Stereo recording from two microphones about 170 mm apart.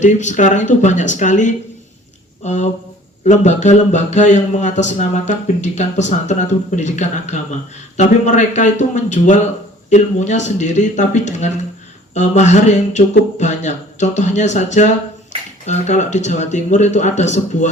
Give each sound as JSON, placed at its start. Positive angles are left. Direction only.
{"t": 0.0, "sound": "a man's voice", "side_deg": 45}